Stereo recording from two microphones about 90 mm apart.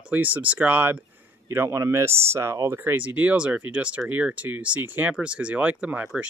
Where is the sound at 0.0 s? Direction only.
20° right (ahead or behind).